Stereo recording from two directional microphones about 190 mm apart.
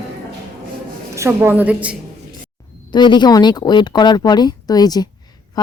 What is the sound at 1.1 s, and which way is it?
Speech, 15° right (ahead or behind).